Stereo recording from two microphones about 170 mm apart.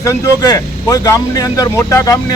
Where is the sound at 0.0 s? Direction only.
20° left (ahead or behind).